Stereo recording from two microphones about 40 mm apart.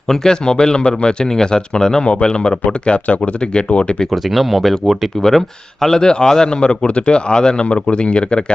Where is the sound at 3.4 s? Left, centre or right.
Left.